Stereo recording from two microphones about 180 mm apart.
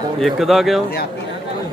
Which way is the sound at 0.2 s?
Centre (ahead or behind).